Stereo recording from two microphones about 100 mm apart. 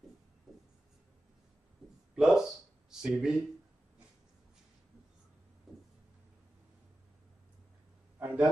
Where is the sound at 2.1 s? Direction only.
5° right (ahead or behind).